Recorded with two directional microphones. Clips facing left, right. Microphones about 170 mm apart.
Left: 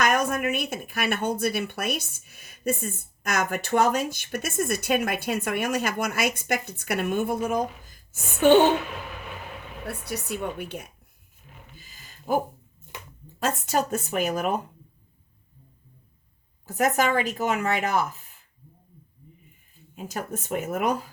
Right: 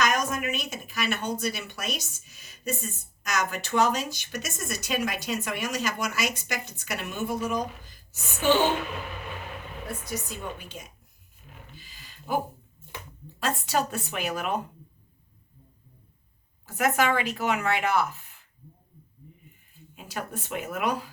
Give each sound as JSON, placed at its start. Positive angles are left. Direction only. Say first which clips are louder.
{"t": 0.0, "sound": "speech", "louder": "left 3 dB", "side_deg": 55}
{"t": 9.8, "sound": "speech", "louder": "left 2 dB", "side_deg": 65}
{"t": 11.8, "sound": "a sound", "louder": "even", "side_deg": 45}
{"t": 13.4, "sound": "a woman's voice", "louder": "left 2 dB", "side_deg": 45}
{"t": 16.6, "sound": "a woman's voice", "louder": "left 1 dB", "side_deg": 40}
{"t": 20.0, "sound": "a woman's voice", "louder": "left 3 dB", "side_deg": 40}